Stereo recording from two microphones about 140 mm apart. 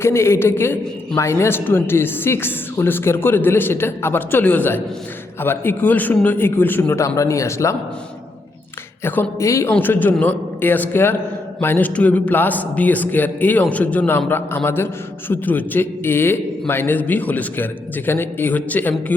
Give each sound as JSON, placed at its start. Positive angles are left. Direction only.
{"t": 0.0, "sound": "a man's voice", "side_deg": 20}
{"t": 9.0, "sound": "a man's voice", "side_deg": 15}